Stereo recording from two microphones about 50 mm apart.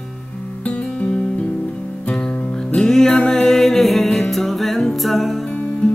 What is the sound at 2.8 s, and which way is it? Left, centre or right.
Music, centre.